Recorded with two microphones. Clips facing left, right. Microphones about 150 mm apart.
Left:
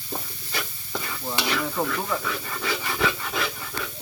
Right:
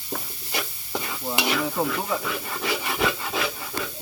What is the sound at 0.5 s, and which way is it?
Stir, 15° right (ahead or behind).